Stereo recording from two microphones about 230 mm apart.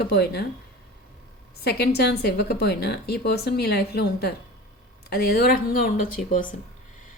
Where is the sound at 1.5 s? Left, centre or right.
Left.